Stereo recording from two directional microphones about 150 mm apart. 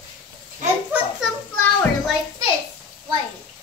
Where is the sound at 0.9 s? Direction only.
10° right (ahead or behind).